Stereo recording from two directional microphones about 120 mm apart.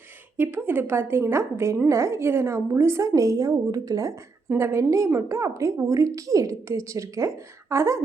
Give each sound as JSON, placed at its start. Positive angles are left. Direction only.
{"t": 0.3, "sound": "a woman's voice", "side_deg": -20}